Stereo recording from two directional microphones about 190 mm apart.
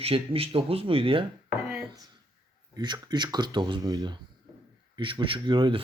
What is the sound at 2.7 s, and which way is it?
Speech, 20° right (ahead or behind).